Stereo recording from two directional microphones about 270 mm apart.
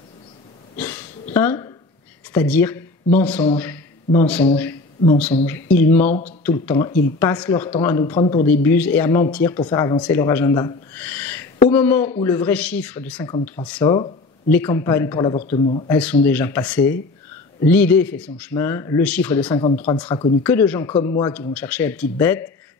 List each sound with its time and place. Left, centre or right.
0.7 s a sound: centre
1.3 s speech: centre
4.6 s a sound: centre
5.4 s speech: centre
15.5 s speech: left
15.9 s speech: centre
19.5 s speech: centre
20.4 s speech: centre